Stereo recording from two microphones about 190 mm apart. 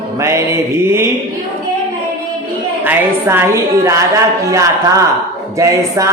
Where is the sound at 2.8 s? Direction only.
15° right (ahead or behind).